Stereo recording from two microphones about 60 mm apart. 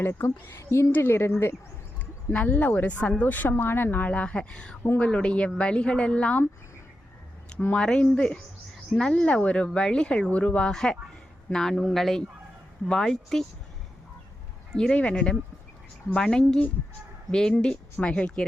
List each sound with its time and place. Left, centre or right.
0.0 s a woman's voice: left
2.3 s a woman's voice: left
3.8 s a woman's voice: left
7.7 s a woman's voice: centre
10.7 s speech: centre
14.8 s a woman's voice: centre